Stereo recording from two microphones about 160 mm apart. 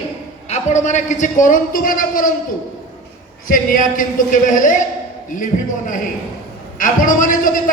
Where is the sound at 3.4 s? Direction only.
60° left (ahead or behind).